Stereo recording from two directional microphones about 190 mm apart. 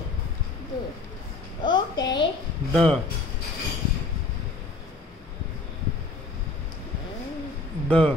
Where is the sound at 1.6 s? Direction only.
25° left (ahead or behind).